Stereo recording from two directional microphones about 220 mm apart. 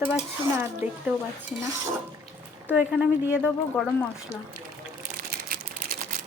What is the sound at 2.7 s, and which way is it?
Speech, 5° right (ahead or behind).